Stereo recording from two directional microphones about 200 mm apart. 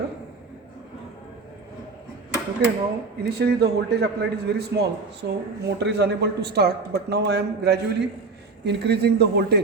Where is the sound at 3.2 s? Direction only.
55° right (ahead or behind).